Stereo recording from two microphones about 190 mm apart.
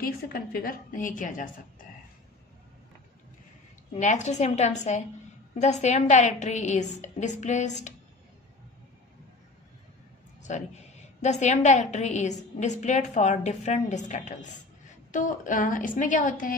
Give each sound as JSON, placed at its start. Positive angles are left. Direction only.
{"t": 0.0, "sound": "a woman's voice", "side_deg": 50}
{"t": 3.9, "sound": "a woman's voice", "side_deg": 40}
{"t": 10.5, "sound": "a woman's voice", "side_deg": 40}